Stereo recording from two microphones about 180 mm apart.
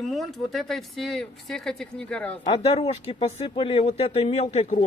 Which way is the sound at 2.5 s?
35° left (ahead or behind).